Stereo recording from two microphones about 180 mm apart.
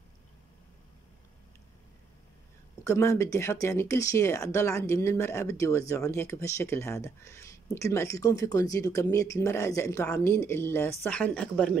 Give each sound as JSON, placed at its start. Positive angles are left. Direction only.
{"t": 2.8, "sound": "speech", "side_deg": 15}